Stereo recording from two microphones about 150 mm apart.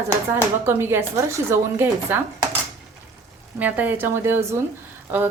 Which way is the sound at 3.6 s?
10° right (ahead or behind).